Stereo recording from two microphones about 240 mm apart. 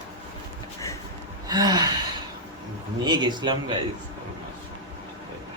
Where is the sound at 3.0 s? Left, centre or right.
Centre.